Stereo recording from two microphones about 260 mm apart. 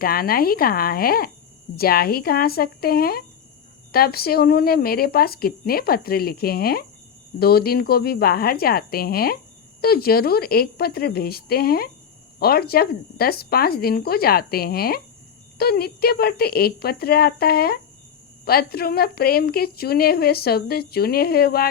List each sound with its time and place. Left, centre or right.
0.0 s a woman's voice: left